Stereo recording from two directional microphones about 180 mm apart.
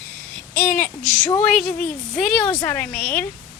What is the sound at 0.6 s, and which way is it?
A child's voice, 10° left (ahead or behind).